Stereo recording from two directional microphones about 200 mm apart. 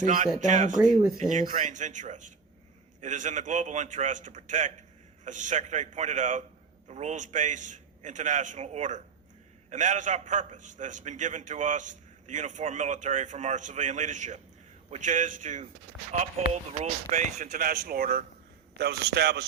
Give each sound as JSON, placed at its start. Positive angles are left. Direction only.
{"t": 0.0, "sound": "a man's voice", "side_deg": -40}